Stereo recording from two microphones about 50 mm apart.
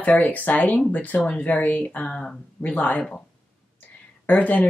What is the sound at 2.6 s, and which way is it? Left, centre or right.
Speech, left.